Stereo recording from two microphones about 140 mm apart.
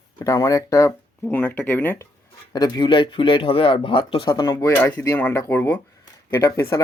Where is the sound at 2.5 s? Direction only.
30° left (ahead or behind).